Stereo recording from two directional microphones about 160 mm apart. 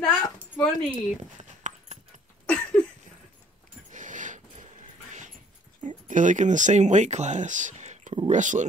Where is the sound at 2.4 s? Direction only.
10° left (ahead or behind).